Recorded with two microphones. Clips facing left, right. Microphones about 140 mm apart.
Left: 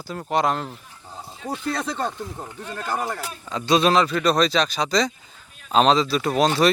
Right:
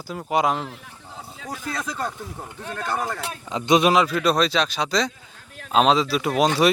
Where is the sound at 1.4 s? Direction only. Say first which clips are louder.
Left 4 dB; 30° left (ahead or behind).